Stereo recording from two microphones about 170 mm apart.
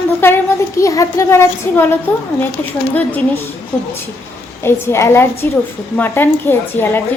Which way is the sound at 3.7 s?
10° left (ahead or behind).